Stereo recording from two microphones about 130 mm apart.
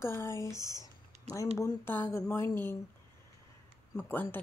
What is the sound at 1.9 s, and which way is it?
Speech, 20° left (ahead or behind).